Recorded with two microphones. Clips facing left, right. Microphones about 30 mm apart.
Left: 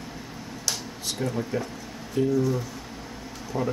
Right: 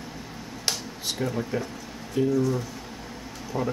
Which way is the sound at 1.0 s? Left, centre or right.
Centre.